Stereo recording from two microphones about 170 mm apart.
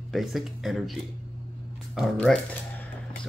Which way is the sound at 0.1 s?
Centre (ahead or behind).